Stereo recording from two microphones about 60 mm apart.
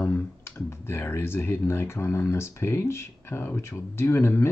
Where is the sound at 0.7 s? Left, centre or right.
Left.